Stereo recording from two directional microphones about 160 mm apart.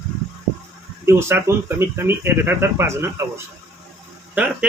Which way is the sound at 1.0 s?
15° right (ahead or behind).